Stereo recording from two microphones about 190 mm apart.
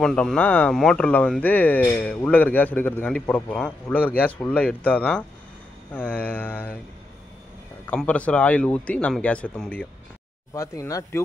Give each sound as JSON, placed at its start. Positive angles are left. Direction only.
{"t": 0.0, "sound": "speech", "side_deg": 5}
{"t": 7.8, "sound": "speech", "side_deg": 5}